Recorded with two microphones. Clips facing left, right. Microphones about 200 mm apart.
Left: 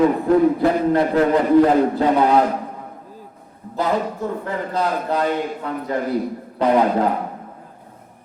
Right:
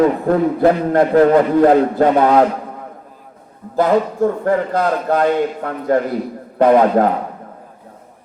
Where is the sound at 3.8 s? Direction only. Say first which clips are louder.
Right 7 dB; 50° right (ahead or behind).